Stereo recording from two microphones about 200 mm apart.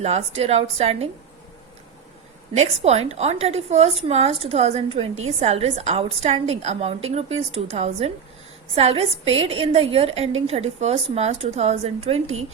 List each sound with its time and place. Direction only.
0.0 s a woman's voice: 30° right (ahead or behind)
2.6 s a woman's voice: 30° right (ahead or behind)